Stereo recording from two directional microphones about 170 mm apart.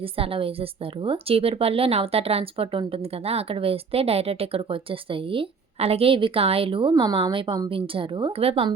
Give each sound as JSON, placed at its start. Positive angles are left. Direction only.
{"t": 0.0, "sound": "a woman's voice", "side_deg": -35}